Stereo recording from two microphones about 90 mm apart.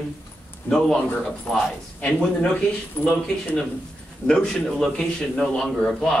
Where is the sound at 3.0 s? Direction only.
20° left (ahead or behind).